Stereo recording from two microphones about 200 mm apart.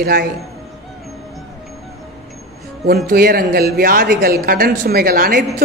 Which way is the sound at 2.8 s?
50° right (ahead or behind).